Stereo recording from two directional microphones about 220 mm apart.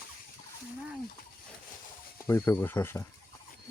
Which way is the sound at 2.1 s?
10° left (ahead or behind).